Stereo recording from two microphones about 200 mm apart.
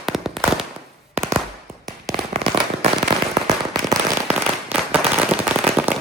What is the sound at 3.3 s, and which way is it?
Firecracker, 20° right (ahead or behind).